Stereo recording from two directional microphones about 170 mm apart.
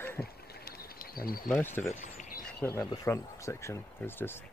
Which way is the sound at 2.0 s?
45° left (ahead or behind).